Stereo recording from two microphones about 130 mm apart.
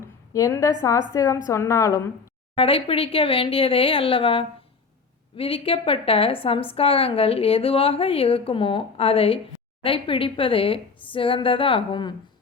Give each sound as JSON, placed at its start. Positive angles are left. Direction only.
{"t": 0.0, "sound": "a woman's voice", "side_deg": 25}
{"t": 2.6, "sound": "a woman's voice", "side_deg": 45}